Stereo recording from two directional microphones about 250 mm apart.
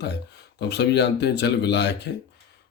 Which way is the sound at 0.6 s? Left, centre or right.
Left.